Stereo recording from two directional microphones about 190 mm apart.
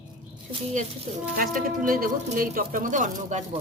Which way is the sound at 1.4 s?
45° right (ahead or behind).